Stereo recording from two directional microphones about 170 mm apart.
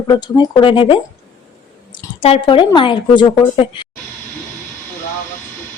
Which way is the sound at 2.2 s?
35° left (ahead or behind).